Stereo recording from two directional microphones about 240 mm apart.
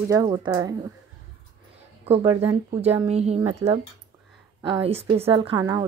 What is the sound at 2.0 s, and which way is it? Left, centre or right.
A woman's voice, right.